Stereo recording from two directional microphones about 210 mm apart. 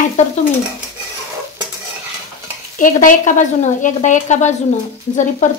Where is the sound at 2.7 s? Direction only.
40° left (ahead or behind).